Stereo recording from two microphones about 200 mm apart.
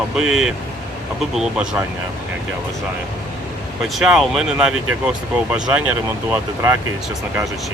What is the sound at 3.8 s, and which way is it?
Speech, centre (ahead or behind).